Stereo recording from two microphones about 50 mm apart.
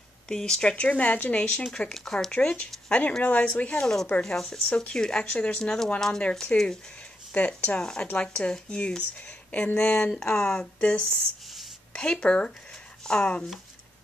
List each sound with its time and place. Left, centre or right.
0.3 s speech: centre
2.5 s speech: left
3.8 s speech: centre
7.3 s speech: left